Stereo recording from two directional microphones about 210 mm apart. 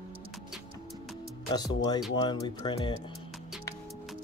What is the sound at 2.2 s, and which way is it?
Speech, 20° left (ahead or behind).